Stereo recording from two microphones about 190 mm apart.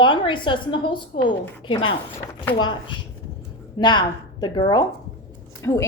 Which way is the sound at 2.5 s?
25° left (ahead or behind).